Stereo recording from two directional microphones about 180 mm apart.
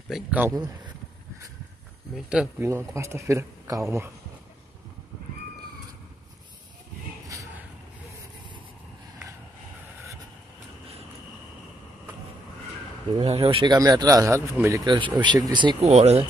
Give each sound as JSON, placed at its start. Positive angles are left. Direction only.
{"t": 0.1, "sound": "speech", "side_deg": -10}
{"t": 2.1, "sound": "speech", "side_deg": -5}
{"t": 13.1, "sound": "speech", "side_deg": -30}